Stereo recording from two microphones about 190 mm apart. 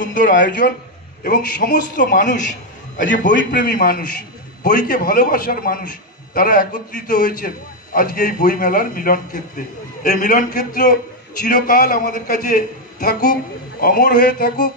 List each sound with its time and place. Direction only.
0.0 s a man's voice: 45° left (ahead or behind)
3.3 s a man's voice: 60° left (ahead or behind)